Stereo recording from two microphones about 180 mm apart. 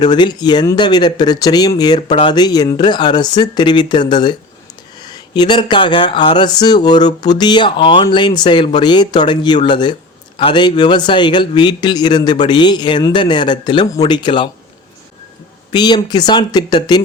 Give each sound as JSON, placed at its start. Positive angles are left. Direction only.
{"t": 0.0, "sound": "speech", "side_deg": 25}
{"t": 15.7, "sound": "speech", "side_deg": 25}